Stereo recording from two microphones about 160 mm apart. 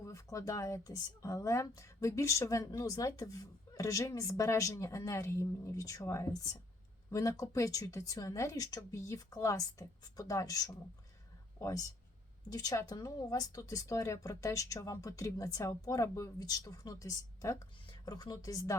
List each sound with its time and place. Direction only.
0.0 s speech: 20° left (ahead or behind)